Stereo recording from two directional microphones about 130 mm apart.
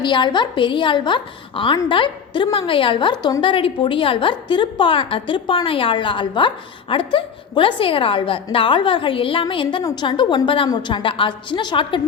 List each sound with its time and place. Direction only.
0.0 s a woman's voice: 35° left (ahead or behind)